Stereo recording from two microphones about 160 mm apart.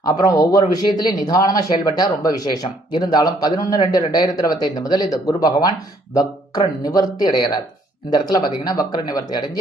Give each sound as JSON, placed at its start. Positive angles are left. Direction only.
{"t": 0.0, "sound": "speech", "side_deg": 25}